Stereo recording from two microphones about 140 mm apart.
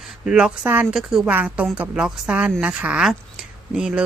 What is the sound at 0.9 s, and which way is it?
A woman's voice, centre (ahead or behind).